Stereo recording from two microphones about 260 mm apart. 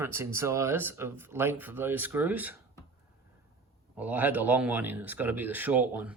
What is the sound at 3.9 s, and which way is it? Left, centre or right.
Speech, centre.